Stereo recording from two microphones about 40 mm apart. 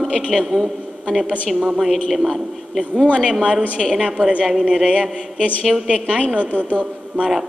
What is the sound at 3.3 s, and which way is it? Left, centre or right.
Speech, right.